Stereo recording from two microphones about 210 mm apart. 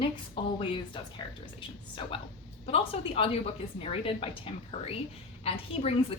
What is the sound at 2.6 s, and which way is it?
A woman's voice, 25° left (ahead or behind).